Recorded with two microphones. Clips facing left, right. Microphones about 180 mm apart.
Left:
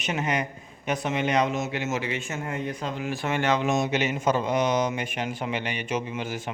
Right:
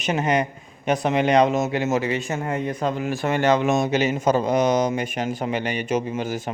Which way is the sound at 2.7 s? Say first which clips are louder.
Right 6 dB; 50° right (ahead or behind).